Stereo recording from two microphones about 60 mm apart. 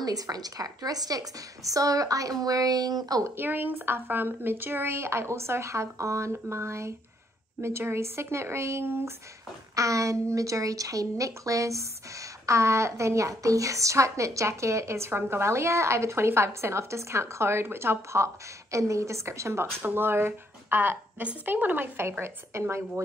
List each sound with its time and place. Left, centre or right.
0.0 s speech: right
3.3 s speech: right
9.8 s speech: right
19.8 s speech: right